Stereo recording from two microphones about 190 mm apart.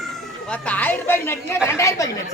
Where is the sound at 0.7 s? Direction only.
10° left (ahead or behind).